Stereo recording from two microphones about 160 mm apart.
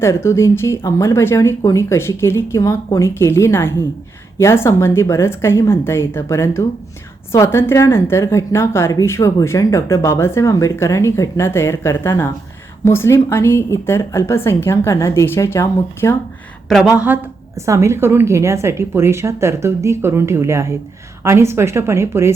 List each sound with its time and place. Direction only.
0.0 s a woman's voice: 15° left (ahead or behind)
16.6 s speech: centre (ahead or behind); by 22.3 s 15° right (ahead or behind)